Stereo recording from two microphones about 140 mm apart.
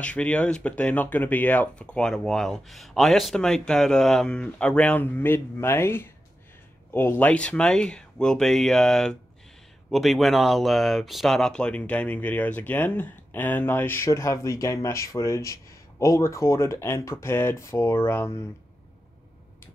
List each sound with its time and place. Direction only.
0.0 s speech: 10° left (ahead or behind)